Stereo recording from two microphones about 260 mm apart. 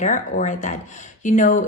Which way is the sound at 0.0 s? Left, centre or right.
Left.